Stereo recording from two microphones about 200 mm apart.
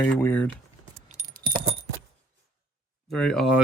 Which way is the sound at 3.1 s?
5° left (ahead or behind).